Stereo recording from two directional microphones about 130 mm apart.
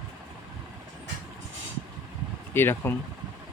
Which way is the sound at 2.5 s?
15° left (ahead or behind).